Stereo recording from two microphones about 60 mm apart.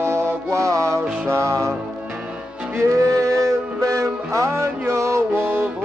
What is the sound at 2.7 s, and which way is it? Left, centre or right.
Music, right.